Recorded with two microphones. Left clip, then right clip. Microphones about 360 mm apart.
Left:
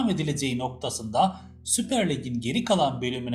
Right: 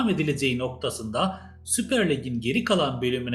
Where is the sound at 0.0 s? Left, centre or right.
Centre.